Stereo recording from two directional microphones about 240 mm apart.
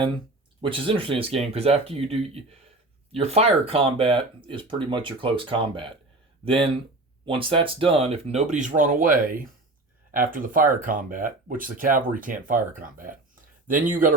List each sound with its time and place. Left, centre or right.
0.6 s speech: right